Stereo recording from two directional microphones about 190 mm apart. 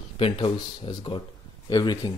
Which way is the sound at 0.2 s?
25° left (ahead or behind).